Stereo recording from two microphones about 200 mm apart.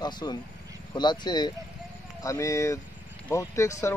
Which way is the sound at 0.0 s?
20° left (ahead or behind).